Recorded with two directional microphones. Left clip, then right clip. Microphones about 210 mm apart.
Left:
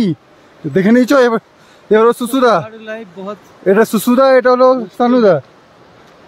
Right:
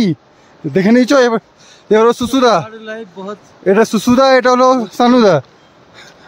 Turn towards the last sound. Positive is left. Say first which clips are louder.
# right 1 dB
turn(degrees=-25)  # may be behind; listen again after turning